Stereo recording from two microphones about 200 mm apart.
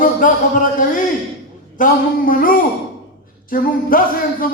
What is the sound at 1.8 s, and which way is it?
Music, 40° left (ahead or behind).